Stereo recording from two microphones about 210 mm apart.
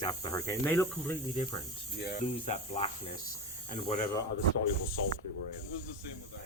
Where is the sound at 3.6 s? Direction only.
30° left (ahead or behind).